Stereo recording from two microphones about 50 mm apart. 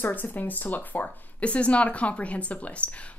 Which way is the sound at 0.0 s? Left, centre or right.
Left.